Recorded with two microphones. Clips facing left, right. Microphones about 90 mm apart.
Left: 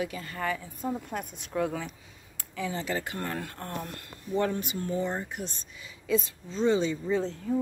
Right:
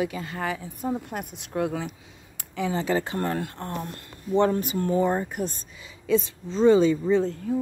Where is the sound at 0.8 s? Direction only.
15° right (ahead or behind).